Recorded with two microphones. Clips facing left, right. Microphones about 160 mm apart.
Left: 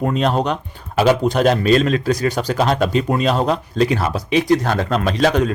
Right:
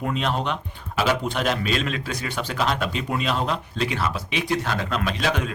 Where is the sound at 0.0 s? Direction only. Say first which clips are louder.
Left 7 dB; 40° left (ahead or behind).